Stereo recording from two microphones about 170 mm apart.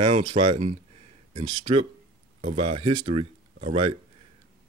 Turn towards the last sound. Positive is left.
turn(degrees=-35)  # may be behind; listen again after turning